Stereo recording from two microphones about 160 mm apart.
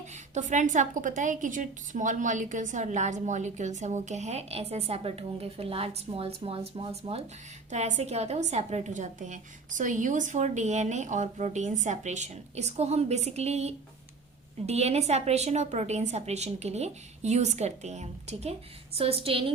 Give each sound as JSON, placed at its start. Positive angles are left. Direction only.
{"t": 0.3, "sound": "a woman's voice", "side_deg": -50}